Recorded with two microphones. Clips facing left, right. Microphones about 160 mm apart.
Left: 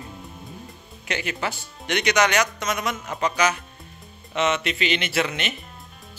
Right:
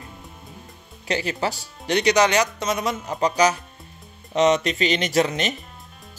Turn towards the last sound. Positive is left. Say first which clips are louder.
# right 5 dB
turn(degrees=-40)  # may be behind; listen again after turning